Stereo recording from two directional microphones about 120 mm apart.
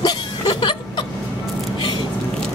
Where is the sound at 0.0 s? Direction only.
35° left (ahead or behind).